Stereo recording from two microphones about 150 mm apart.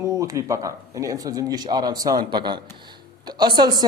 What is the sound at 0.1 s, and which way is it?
Speech, 20° right (ahead or behind).